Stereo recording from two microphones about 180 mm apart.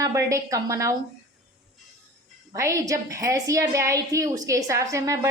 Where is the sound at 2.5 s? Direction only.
20° right (ahead or behind).